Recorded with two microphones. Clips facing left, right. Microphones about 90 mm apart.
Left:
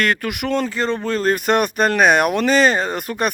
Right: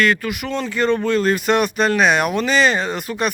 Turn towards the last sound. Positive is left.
turn(degrees=50)  # may be behind; listen again after turning